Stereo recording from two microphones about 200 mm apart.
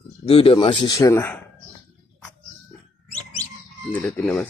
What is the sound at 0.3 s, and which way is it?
A man's voice, 30° left (ahead or behind).